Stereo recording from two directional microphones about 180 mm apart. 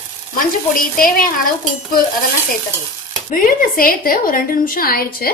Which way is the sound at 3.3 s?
50° left (ahead or behind).